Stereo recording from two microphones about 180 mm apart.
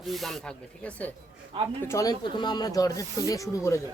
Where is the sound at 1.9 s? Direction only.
20° left (ahead or behind).